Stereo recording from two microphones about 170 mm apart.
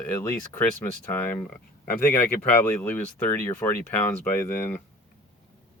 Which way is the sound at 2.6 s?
15° left (ahead or behind).